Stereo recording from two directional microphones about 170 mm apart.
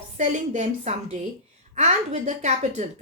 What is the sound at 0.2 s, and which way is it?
A woman's voice, 45° right (ahead or behind).